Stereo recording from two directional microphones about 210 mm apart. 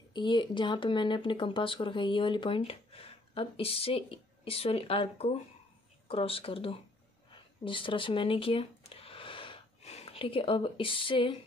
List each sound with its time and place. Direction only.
0.1 s speech: 20° left (ahead or behind)